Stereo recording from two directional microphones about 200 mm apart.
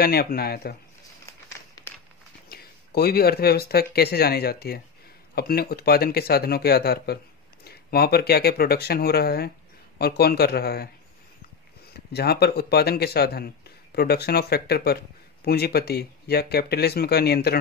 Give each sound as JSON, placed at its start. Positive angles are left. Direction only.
{"t": 0.0, "sound": "speech", "side_deg": 50}
{"t": 1.8, "sound": "a sound", "side_deg": 15}
{"t": 2.5, "sound": "speech", "side_deg": 50}
{"t": 11.9, "sound": "speech", "side_deg": 50}